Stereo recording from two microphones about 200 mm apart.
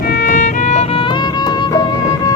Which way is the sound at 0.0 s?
45° left (ahead or behind).